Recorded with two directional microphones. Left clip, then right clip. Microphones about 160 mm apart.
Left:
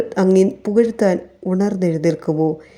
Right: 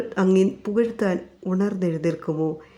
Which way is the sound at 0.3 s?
15° left (ahead or behind).